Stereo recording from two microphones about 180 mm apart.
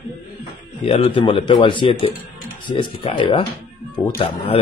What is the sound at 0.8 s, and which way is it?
Speech, 30° left (ahead or behind).